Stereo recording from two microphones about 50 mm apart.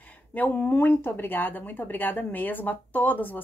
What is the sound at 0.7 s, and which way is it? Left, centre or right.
A woman's voice, left.